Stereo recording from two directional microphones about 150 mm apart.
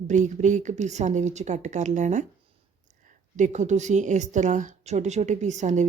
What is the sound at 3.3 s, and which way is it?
A woman's voice, 55° right (ahead or behind).